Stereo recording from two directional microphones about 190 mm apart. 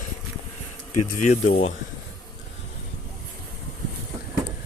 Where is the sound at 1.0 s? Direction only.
45° left (ahead or behind).